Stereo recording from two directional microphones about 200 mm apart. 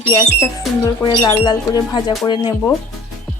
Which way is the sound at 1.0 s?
20° left (ahead or behind).